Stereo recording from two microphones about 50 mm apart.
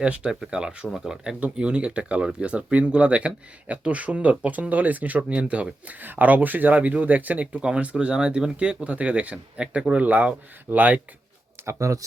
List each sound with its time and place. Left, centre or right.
0.0 s speech: right
1.4 s speech: right
7.6 s speech: centre; by 11.0 s right
11.6 s speech: right